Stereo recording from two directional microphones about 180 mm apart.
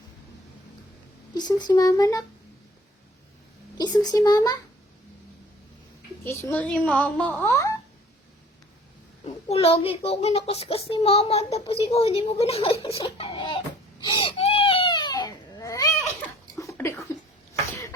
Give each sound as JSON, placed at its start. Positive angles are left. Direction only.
{"t": 1.3, "sound": "speech", "side_deg": 25}
{"t": 3.8, "sound": "speech", "side_deg": 20}
{"t": 6.2, "sound": "a woman's voice", "side_deg": 10}
{"t": 9.2, "sound": "a child's voice", "side_deg": 35}
{"t": 12.8, "sound": "a sound", "side_deg": 25}
{"t": 14.0, "sound": "baby cry", "side_deg": 25}